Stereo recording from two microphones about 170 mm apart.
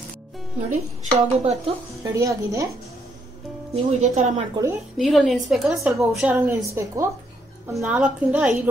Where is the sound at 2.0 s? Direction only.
15° right (ahead or behind).